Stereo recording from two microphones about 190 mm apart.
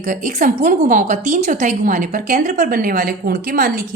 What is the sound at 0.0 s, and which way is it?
A woman's voice, 40° right (ahead or behind).